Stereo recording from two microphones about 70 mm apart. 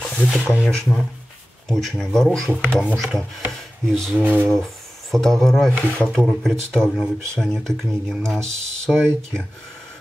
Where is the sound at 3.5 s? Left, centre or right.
Centre.